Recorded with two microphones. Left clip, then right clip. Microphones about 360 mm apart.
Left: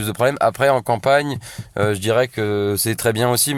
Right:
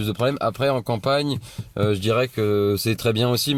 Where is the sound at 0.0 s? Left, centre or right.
Left.